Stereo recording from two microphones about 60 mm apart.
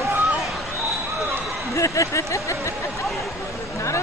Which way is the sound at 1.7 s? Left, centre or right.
Left.